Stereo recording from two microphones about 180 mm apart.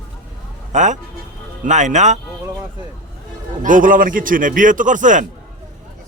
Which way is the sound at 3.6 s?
50° right (ahead or behind).